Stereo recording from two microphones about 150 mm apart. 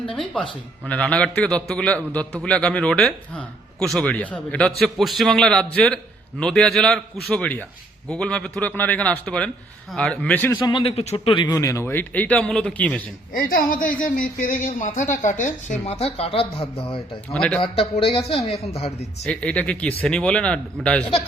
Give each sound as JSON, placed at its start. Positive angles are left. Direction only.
{"t": 0.0, "sound": "a man's voice", "side_deg": 5}
{"t": 10.6, "sound": "speech", "side_deg": 35}
{"t": 13.3, "sound": "speech", "side_deg": 75}
{"t": 17.3, "sound": "a man's voice", "side_deg": 5}
{"t": 17.6, "sound": "a man's voice", "side_deg": 40}
{"t": 19.2, "sound": "a man's voice", "side_deg": 10}